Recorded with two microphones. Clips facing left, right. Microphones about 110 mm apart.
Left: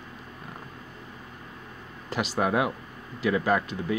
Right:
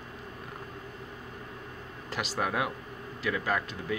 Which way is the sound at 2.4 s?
15° left (ahead or behind).